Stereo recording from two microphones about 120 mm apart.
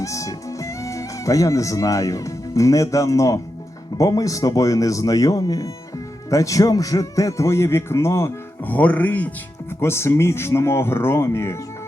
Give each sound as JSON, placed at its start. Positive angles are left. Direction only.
{"t": 0.0, "sound": "a man's voice", "side_deg": 25}